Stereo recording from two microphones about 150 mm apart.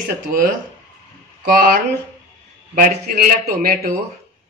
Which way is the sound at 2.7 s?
75° right (ahead or behind).